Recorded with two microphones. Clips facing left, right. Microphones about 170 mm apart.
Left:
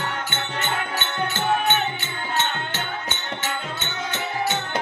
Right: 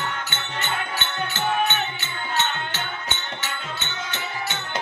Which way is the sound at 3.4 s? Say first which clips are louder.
Left 3 dB; 45° left (ahead or behind).